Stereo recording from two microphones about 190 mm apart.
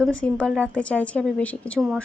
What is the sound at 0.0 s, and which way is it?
A woman's voice, 5° left (ahead or behind).